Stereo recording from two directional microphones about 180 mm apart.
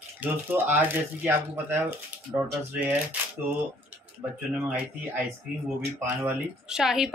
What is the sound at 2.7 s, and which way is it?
Speech, 10° right (ahead or behind).